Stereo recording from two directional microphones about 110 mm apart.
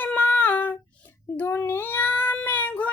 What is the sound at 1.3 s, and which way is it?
Child singing, 20° left (ahead or behind).